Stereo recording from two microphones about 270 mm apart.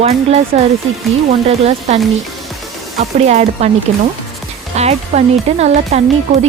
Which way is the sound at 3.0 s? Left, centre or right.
Right.